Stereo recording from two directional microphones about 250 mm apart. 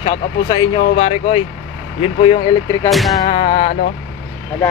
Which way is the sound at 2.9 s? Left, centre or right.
Centre.